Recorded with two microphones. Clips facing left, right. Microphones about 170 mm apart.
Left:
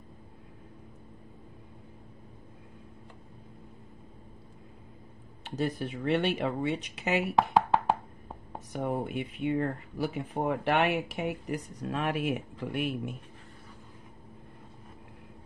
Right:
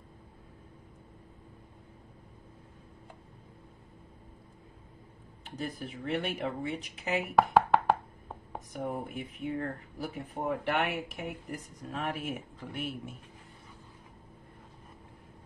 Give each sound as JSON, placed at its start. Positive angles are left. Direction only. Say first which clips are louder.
{"t": 5.4, "sound": "speech", "louder": "left 6 dB", "side_deg": 85}
{"t": 8.7, "sound": "speech", "louder": "left 5 dB", "side_deg": 80}